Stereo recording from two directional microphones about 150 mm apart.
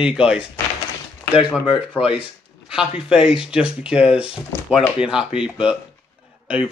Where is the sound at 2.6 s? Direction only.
5° right (ahead or behind).